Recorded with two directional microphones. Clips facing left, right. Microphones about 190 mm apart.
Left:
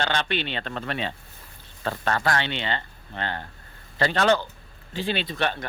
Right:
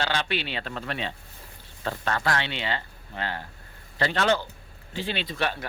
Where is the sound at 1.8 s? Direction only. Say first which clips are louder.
Left 2 dB; 50° left (ahead or behind).